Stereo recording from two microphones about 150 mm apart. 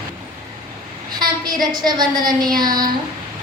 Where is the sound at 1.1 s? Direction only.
30° right (ahead or behind).